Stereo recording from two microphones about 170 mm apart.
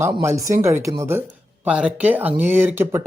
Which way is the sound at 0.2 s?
20° right (ahead or behind).